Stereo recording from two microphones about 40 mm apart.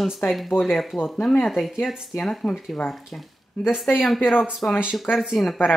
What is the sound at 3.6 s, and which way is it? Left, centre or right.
Speech, left.